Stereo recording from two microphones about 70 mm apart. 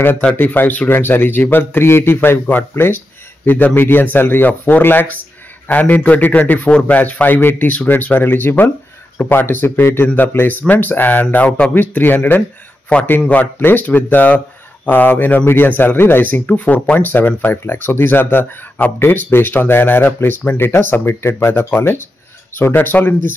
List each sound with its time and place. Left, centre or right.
0.4 s speech: left
11.7 s speech: left
12.9 s a man's voice: centre